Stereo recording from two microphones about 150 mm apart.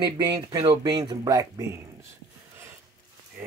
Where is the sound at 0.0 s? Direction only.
30° right (ahead or behind).